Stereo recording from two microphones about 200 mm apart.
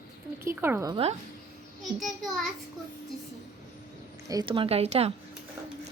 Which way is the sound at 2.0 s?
Centre (ahead or behind).